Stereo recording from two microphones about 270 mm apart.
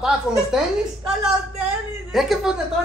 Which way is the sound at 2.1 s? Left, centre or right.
Centre.